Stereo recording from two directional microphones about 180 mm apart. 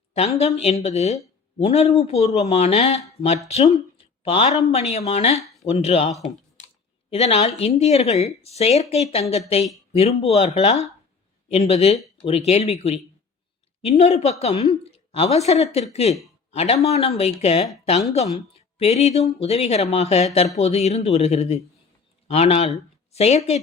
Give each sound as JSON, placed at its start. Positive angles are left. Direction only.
{"t": 0.1, "sound": "speech", "side_deg": 35}
{"t": 3.9, "sound": "a sound", "side_deg": 30}
{"t": 4.7, "sound": "speech", "side_deg": 35}